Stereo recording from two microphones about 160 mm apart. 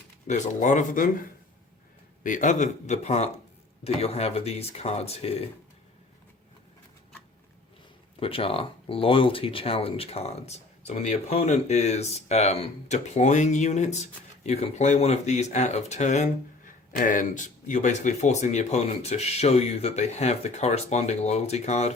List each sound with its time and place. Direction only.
0.3 s speech: 50° left (ahead or behind)
2.2 s speech: 50° left (ahead or behind)
8.2 s speech: 35° left (ahead or behind)